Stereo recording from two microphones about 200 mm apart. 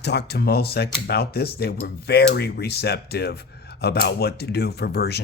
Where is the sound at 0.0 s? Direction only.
55° left (ahead or behind).